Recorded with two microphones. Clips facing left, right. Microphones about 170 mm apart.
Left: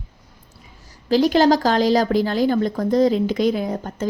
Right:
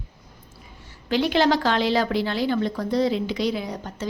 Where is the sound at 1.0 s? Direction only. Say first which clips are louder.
Left 5 dB; 40° left (ahead or behind).